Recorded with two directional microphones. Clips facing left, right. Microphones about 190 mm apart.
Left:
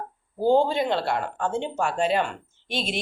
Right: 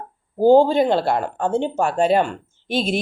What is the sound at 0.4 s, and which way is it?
Speech, 35° right (ahead or behind).